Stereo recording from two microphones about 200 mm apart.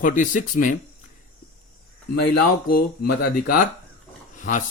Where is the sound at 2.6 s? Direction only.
50° left (ahead or behind).